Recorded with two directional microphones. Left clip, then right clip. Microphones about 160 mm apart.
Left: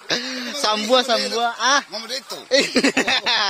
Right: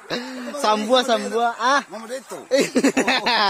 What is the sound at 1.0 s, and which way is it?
Speech, 25° right (ahead or behind).